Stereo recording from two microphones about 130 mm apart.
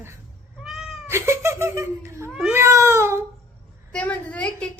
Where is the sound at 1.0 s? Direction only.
20° right (ahead or behind).